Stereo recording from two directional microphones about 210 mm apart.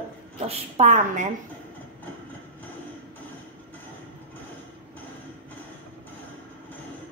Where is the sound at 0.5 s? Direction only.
35° right (ahead or behind).